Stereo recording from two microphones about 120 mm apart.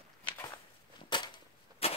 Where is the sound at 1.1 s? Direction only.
40° left (ahead or behind).